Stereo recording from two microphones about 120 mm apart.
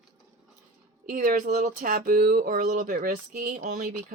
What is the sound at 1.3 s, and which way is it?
Speech, 90° right.